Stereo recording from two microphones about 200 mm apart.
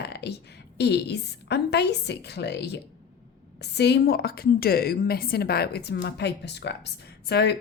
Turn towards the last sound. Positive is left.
turn(degrees=55)  # may be behind; listen again after turning